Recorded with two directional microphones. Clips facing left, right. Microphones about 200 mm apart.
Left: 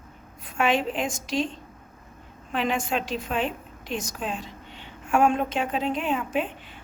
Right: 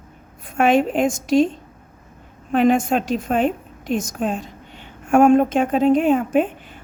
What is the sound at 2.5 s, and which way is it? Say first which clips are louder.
A woman's voice: right 10 dB; 45° right (ahead or behind).